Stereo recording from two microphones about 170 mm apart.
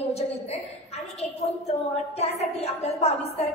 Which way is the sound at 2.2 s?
40° left (ahead or behind).